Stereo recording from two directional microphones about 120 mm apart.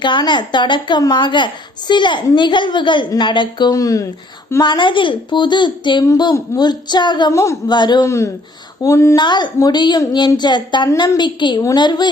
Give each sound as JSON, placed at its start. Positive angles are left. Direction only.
{"t": 0.0, "sound": "a woman's voice", "side_deg": 40}
{"t": 4.6, "sound": "a woman's voice", "side_deg": 40}
{"t": 8.0, "sound": "speech", "side_deg": 25}
{"t": 9.1, "sound": "a woman's voice", "side_deg": 40}